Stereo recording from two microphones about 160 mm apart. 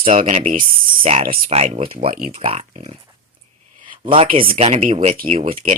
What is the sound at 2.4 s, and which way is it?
Speech, 40° right (ahead or behind).